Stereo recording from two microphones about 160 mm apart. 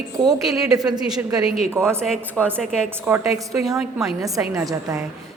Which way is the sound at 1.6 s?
15° right (ahead or behind).